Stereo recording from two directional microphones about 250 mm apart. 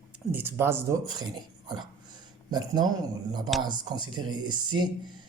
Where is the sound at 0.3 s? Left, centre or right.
Centre.